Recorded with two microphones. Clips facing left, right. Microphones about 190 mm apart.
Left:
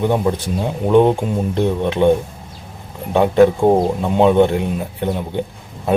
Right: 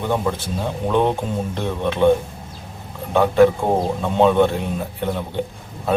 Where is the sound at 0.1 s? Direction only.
15° left (ahead or behind).